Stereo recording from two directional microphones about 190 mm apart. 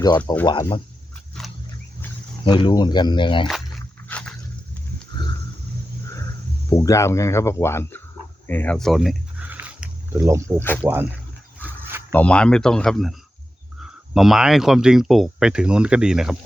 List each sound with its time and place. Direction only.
0.4 s speech: 25° left (ahead or behind)
1.4 s wild animals: 5° left (ahead or behind)
2.4 s speech: 25° left (ahead or behind)
4.1 s a sound: 5° left (ahead or behind)
6.7 s speech: 15° left (ahead or behind)
8.4 s a sound: 10° left (ahead or behind); by 10.6 s 15° right (ahead or behind)
10.8 s speech: 10° right (ahead or behind)
11.6 s dog: 10° right (ahead or behind)
12.1 s speech: 5° left (ahead or behind)